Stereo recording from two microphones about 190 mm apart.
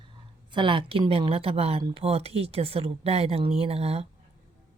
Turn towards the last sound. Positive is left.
turn(degrees=-30)  # may be behind; listen again after turning